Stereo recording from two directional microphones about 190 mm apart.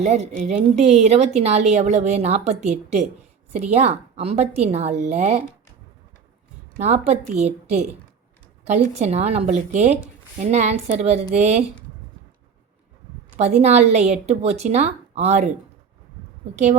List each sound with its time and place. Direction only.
0.0 s a woman's voice: 35° right (ahead or behind)
6.7 s a woman's voice: 35° right (ahead or behind)
13.3 s a woman's voice: 35° right (ahead or behind)